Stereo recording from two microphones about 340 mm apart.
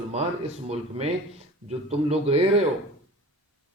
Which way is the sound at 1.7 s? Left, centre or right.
Centre.